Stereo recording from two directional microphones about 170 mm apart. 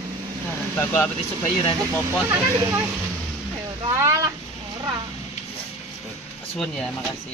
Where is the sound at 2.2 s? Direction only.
20° right (ahead or behind).